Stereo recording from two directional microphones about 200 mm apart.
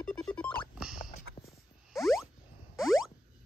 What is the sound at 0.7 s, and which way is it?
Rodents, 5° right (ahead or behind).